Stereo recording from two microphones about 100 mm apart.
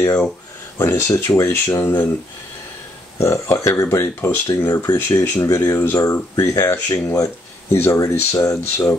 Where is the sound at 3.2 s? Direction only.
30° left (ahead or behind).